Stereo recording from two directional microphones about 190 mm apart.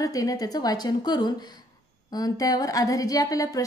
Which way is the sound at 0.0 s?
20° left (ahead or behind).